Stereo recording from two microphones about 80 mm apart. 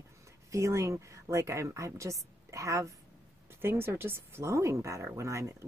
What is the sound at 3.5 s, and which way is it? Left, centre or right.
A woman's voice, right.